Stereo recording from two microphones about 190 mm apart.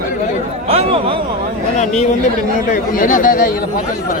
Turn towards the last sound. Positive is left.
turn(degrees=45)  # may be behind; listen again after turning